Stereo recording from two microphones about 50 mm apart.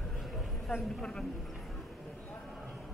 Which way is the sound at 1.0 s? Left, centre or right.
Centre.